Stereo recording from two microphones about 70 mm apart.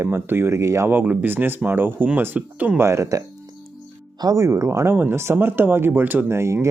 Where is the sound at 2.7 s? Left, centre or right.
Right.